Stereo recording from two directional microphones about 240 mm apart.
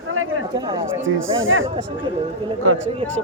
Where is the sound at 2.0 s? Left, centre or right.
Right.